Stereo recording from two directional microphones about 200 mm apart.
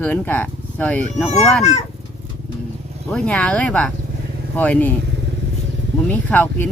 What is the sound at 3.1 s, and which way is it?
Speech, 5° left (ahead or behind).